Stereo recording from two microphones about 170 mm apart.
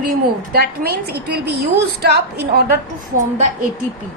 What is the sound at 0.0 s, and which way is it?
A woman's voice, 60° right (ahead or behind).